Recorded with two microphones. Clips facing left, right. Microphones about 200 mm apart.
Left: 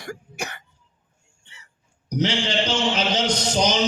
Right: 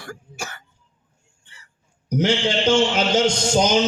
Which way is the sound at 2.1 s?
50° right (ahead or behind).